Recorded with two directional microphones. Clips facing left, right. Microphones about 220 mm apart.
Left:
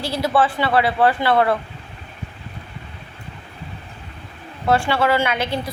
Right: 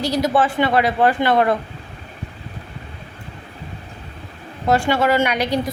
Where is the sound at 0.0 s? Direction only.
45° right (ahead or behind).